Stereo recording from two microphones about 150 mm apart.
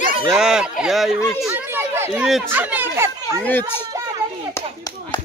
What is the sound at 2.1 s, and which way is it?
Speech, 5° right (ahead or behind).